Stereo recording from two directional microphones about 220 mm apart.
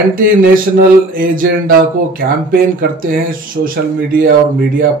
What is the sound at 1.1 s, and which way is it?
Speech, 40° right (ahead or behind).